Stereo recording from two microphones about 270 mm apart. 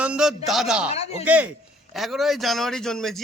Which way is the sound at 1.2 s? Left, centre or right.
Centre.